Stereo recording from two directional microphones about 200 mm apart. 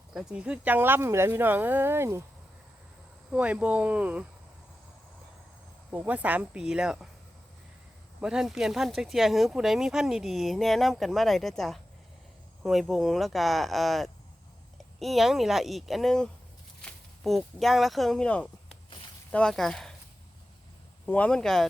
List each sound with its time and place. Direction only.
0.1 s speech: 5° right (ahead or behind)
3.3 s speech: 5° right (ahead or behind)
5.9 s speech: 10° right (ahead or behind)
8.2 s speech: 5° right (ahead or behind)
18.9 s a sound: 25° left (ahead or behind)
19.3 s speech: 5° left (ahead or behind)
21.1 s speech: 5° left (ahead or behind)